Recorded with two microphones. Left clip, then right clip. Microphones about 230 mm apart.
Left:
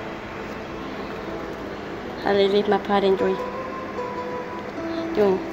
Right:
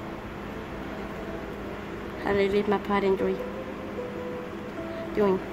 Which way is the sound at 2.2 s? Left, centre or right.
Centre.